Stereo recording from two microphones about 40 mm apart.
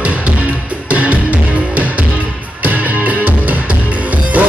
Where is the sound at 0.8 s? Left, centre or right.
Right.